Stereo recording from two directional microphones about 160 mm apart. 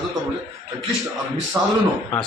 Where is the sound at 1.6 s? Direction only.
15° right (ahead or behind).